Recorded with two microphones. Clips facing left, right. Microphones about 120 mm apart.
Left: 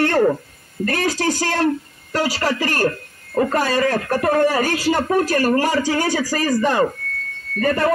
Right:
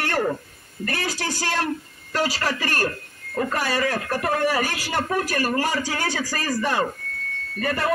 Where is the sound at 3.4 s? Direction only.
40° left (ahead or behind).